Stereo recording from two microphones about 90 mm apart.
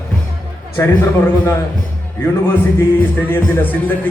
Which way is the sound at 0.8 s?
35° left (ahead or behind).